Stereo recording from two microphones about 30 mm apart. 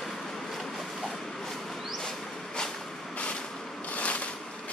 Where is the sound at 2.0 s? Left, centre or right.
Left.